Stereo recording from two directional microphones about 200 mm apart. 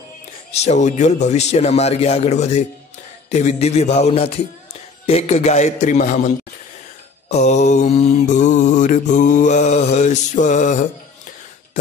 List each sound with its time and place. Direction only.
0.5 s mantra: 35° left (ahead or behind)